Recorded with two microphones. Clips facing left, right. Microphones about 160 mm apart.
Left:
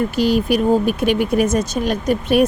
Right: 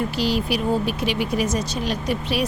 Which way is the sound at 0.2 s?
50° left (ahead or behind).